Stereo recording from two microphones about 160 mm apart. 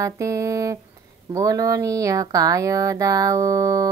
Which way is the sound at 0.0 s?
20° right (ahead or behind).